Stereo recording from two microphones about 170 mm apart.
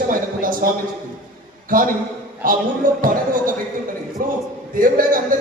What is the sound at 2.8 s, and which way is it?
Speech, 50° right (ahead or behind).